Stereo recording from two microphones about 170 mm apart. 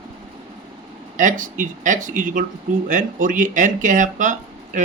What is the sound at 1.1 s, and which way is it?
Speech, 50° right (ahead or behind).